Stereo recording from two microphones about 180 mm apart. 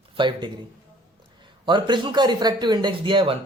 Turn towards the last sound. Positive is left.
turn(degrees=-30)  # may be behind; listen again after turning